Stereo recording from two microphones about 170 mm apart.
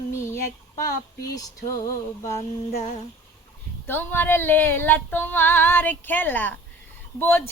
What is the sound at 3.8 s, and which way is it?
Female singing, 10° left (ahead or behind).